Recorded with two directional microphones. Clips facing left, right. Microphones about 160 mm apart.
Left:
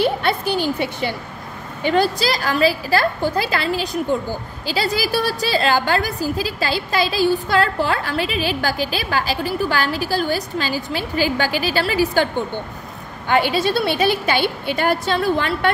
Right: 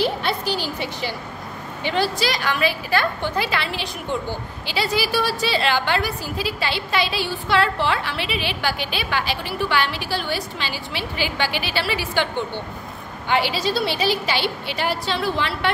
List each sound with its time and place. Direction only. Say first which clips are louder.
0.0 s a woman's voice: left 3 dB; 55° left (ahead or behind)
13.3 s a woman's voice: left 4 dB; 50° left (ahead or behind)